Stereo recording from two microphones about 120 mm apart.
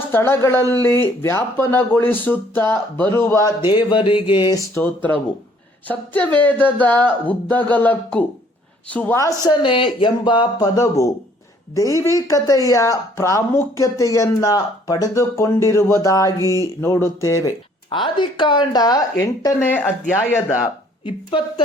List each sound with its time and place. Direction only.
0.1 s speech: 20° left (ahead or behind)
3.8 s speech: 40° left (ahead or behind)
4.7 s speech: 20° left (ahead or behind)
9.1 s speech: 25° left (ahead or behind)
9.5 s speech: 45° left (ahead or behind)
10.8 s speech: 25° left (ahead or behind)
17.9 s speech: 40° left (ahead or behind)
19.7 s speech: 15° left (ahead or behind)
21.0 s speech: 45° left (ahead or behind)